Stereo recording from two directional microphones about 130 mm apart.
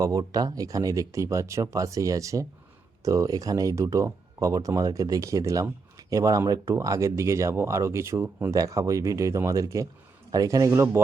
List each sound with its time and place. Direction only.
0.0 s speech: 30° right (ahead or behind)